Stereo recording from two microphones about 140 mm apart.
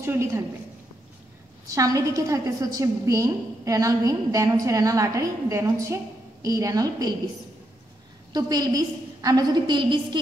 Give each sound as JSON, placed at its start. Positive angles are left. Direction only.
{"t": 0.0, "sound": "a woman's voice", "side_deg": -20}
{"t": 1.7, "sound": "a woman's voice", "side_deg": -25}
{"t": 8.3, "sound": "a woman's voice", "side_deg": -30}